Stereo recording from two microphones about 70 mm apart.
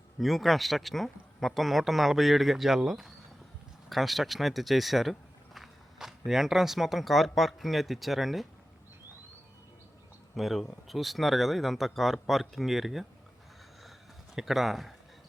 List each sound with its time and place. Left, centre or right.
0.2 s speech: centre
10.3 s speech: centre
14.3 s speech: centre